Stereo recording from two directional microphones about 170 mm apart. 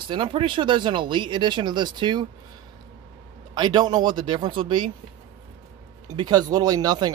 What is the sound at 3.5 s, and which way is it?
Speech, 25° right (ahead or behind).